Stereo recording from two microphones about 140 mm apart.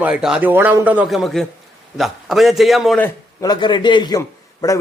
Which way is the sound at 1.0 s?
Centre (ahead or behind).